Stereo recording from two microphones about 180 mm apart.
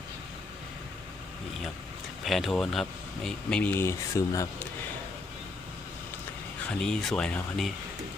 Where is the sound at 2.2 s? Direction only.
Centre (ahead or behind); by 4.3 s 15° left (ahead or behind).